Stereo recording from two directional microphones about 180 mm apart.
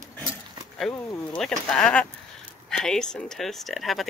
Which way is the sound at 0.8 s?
Centre (ahead or behind).